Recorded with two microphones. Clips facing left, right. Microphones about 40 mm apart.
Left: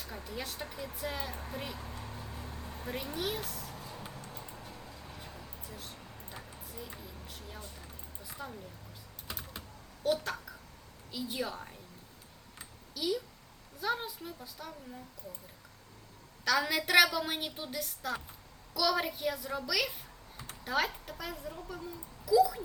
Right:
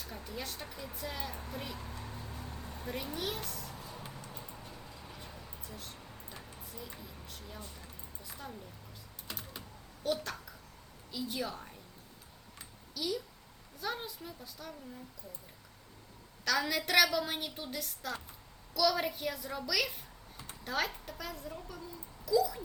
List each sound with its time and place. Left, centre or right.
0.2 s a woman's voice: centre
2.5 s vehicle: centre
3.0 s a child's voice: centre
4.7 s vehicle: centre
5.9 s a sound: centre
9.2 s typing: centre
11.1 s a woman's voice: centre
12.5 s a sound: centre
13.8 s a woman's voice: centre
16.4 s a woman's voice: centre